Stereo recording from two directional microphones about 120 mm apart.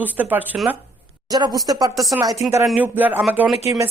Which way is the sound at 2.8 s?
15° right (ahead or behind).